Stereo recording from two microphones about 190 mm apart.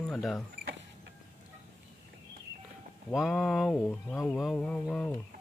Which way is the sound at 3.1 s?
Centre (ahead or behind).